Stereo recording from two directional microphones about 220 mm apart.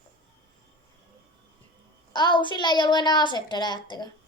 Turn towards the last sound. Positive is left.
turn(degrees=20)  # may be behind; listen again after turning